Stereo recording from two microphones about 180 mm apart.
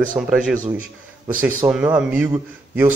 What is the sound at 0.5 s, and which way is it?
Speech, 45° right (ahead or behind).